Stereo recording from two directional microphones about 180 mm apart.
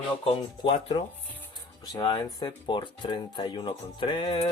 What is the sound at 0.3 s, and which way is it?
Speech, 30° left (ahead or behind).